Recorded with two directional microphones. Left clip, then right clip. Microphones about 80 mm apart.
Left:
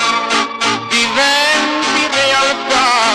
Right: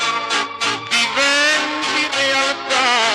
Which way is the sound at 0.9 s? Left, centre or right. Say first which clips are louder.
Left 3 dB; right.